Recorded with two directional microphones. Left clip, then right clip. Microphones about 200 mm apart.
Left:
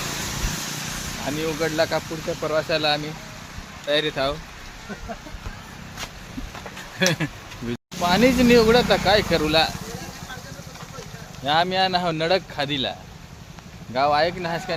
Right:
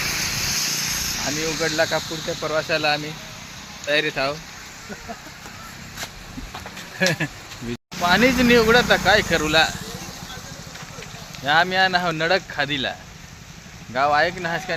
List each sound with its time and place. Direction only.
0.0 s vehicle: 30° left (ahead or behind); by 1.2 s 50° left (ahead or behind)
1.4 s speech: centre (ahead or behind)
7.0 s speech: 5° right (ahead or behind)
11.4 s speech: centre (ahead or behind)